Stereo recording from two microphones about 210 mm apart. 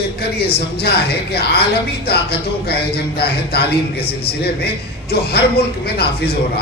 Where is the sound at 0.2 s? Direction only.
50° left (ahead or behind).